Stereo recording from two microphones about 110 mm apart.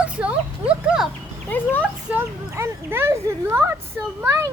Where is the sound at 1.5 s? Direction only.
15° left (ahead or behind).